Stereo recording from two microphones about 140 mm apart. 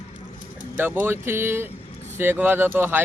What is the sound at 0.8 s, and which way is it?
Speech, 15° right (ahead or behind).